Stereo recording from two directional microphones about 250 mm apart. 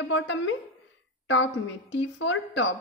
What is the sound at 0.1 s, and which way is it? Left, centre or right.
A woman's voice, left.